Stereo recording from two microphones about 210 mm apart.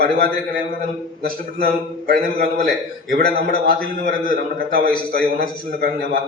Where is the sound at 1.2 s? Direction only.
45° right (ahead or behind).